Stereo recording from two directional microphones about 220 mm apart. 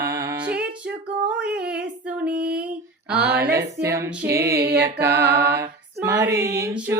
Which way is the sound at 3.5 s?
15° right (ahead or behind).